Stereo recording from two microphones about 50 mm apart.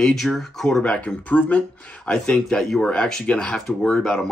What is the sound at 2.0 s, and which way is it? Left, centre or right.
Speech, centre.